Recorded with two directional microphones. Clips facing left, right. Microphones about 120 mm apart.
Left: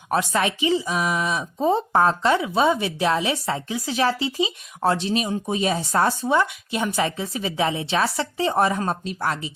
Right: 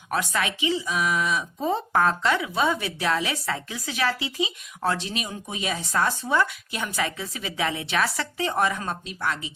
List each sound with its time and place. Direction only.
0.1 s a woman's voice: 30° left (ahead or behind)